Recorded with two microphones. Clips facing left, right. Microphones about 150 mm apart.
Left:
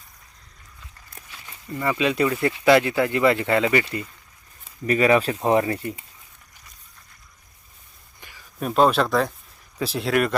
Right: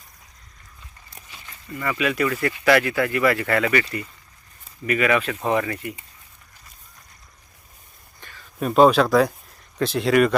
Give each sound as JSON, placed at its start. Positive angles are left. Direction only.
{"t": 1.7, "sound": "speech", "side_deg": 25}
{"t": 8.2, "sound": "a sound", "side_deg": 10}
{"t": 8.5, "sound": "speech", "side_deg": -5}